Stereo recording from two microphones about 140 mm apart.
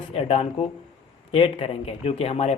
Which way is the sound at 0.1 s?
45° left (ahead or behind).